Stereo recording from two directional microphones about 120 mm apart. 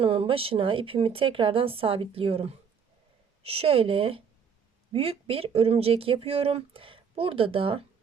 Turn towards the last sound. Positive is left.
turn(degrees=-50)  # may be behind; listen again after turning